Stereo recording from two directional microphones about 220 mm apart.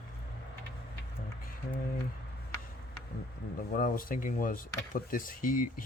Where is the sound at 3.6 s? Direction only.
40° left (ahead or behind).